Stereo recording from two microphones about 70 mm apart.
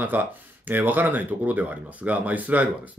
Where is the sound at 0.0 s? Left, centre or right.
Right.